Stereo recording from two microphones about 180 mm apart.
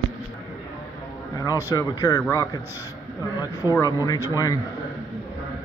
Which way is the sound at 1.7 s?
20° left (ahead or behind).